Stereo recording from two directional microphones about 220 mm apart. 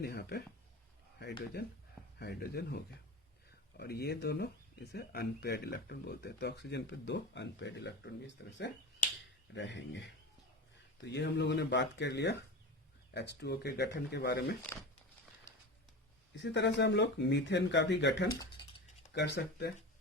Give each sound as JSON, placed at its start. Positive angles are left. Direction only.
{"t": 0.0, "sound": "speech", "side_deg": 45}
{"t": 2.1, "sound": "speech", "side_deg": 45}
{"t": 9.6, "sound": "speech", "side_deg": 55}
{"t": 16.4, "sound": "speech", "side_deg": 55}